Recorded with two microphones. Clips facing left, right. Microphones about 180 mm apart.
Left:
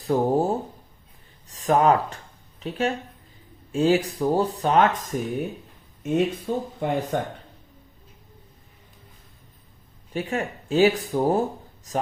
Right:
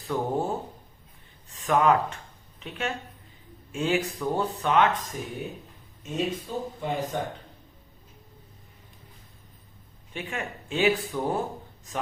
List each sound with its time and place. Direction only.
0.1 s speech: 40° left (ahead or behind)
5.1 s speech: 50° left (ahead or behind)
10.1 s speech: 40° left (ahead or behind)